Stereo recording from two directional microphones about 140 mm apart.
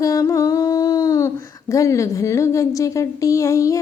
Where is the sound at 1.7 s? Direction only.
20° left (ahead or behind).